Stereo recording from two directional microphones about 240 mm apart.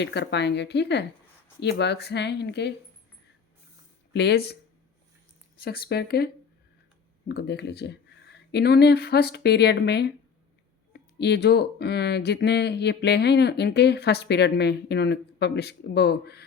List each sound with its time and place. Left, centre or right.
0.0 s speech: left
4.1 s speech: left
5.5 s speech: left